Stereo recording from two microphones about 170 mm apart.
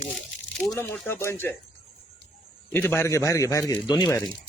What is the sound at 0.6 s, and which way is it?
Speech, 5° left (ahead or behind).